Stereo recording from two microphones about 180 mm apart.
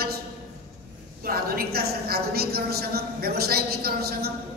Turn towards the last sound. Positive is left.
turn(degrees=-60)  # may be behind; listen again after turning